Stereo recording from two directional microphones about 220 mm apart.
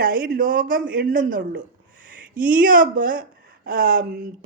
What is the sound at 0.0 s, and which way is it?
A woman's voice, 40° right (ahead or behind).